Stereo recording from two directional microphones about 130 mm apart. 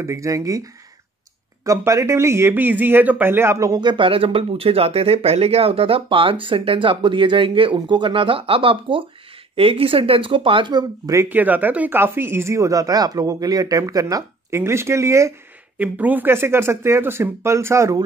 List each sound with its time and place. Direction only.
0.0 s speech: 20° right (ahead or behind)
11.2 s speech: 15° right (ahead or behind)